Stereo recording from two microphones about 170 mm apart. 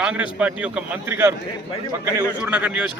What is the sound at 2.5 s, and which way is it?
Speech, 10° right (ahead or behind).